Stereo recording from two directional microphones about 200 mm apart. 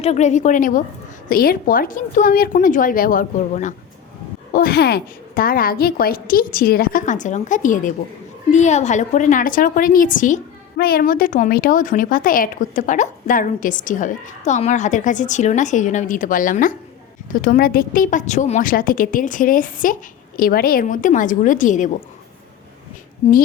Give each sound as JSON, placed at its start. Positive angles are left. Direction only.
{"t": 0.0, "sound": "a woman's voice", "side_deg": 35}
{"t": 4.5, "sound": "a woman's voice", "side_deg": 50}